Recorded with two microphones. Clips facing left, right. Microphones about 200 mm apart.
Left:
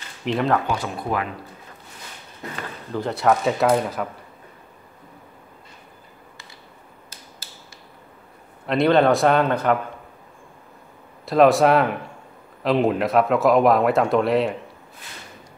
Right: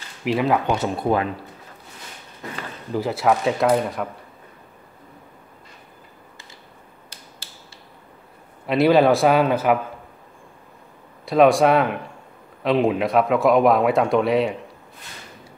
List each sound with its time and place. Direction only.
0.2 s speech: 5° right (ahead or behind)
0.7 s speech: 25° right (ahead or behind)
2.9 s speech: 5° right (ahead or behind)
8.6 s speech: 5° right (ahead or behind)
11.2 s speech: centre (ahead or behind)